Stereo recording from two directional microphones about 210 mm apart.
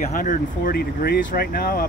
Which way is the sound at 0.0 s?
40° left (ahead or behind).